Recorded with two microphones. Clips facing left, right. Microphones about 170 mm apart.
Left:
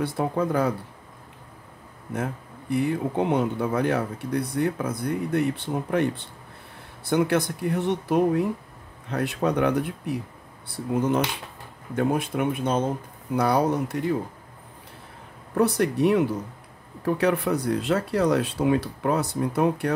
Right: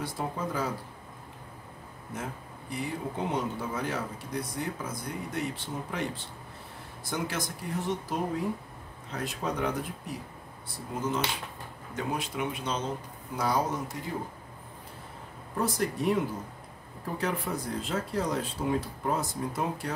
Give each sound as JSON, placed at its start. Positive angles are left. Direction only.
{"t": 0.0, "sound": "speech", "side_deg": 60}
{"t": 2.1, "sound": "speech", "side_deg": 60}
{"t": 13.4, "sound": "speech", "side_deg": 65}
{"t": 15.5, "sound": "speech", "side_deg": 65}